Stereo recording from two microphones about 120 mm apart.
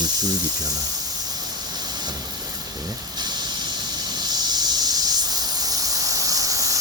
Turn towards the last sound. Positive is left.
turn(degrees=-30)  # may be behind; listen again after turning